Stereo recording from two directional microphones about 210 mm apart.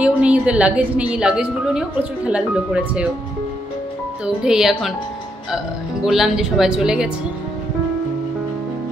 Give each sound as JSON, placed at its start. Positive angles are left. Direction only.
{"t": 0.0, "sound": "a woman's voice", "side_deg": -5}
{"t": 4.4, "sound": "a woman's voice", "side_deg": -5}
{"t": 6.0, "sound": "a woman's voice", "side_deg": 0}